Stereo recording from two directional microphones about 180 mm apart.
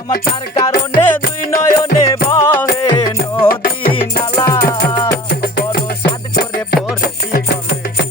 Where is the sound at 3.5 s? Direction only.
55° left (ahead or behind).